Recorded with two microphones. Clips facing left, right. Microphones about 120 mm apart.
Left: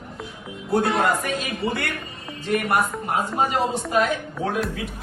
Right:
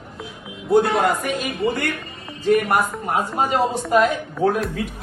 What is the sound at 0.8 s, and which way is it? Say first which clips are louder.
Speech: right 2 dB; centre (ahead or behind).